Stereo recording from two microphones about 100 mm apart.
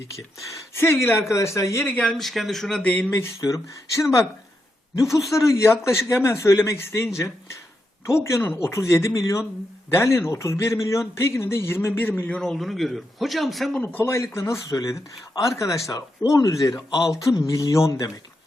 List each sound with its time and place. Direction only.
0.8 s a man's voice: 25° left (ahead or behind)
1.9 s speech: 10° left (ahead or behind)
3.1 s a man's voice: 25° left (ahead or behind)
5.3 s a man's voice: 30° left (ahead or behind)
12.4 s a man's voice: 5° left (ahead or behind)
13.8 s a man's voice: 20° left (ahead or behind)
16.9 s a man's voice: 5° right (ahead or behind)
17.2 s speech: 30° left (ahead or behind)